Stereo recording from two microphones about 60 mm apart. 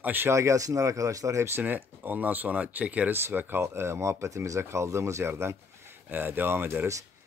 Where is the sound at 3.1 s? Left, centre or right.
Right.